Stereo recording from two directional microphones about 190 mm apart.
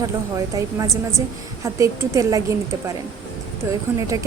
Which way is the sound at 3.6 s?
15° right (ahead or behind).